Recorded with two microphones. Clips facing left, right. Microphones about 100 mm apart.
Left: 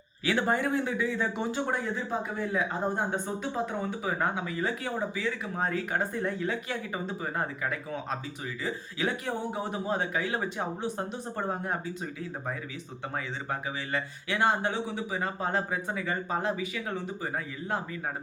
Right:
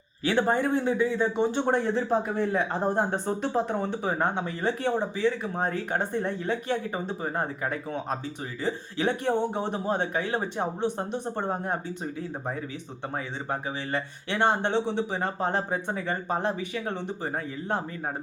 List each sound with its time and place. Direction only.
0.3 s speech: 30° right (ahead or behind)
13.1 s speech: 30° right (ahead or behind)